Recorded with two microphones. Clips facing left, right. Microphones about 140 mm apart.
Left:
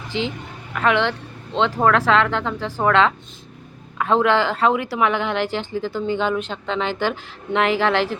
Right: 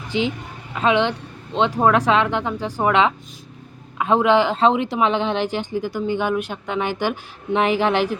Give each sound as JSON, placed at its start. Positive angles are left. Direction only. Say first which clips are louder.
{"t": 0.1, "sound": "a woman's voice", "louder": "right 3 dB", "side_deg": -15}